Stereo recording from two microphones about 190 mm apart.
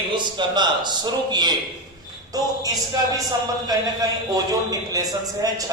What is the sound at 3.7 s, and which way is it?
A man's voice, 20° right (ahead or behind).